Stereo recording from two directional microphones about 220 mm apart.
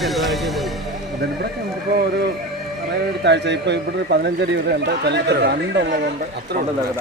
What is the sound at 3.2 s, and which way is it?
A man's voice, 50° right (ahead or behind).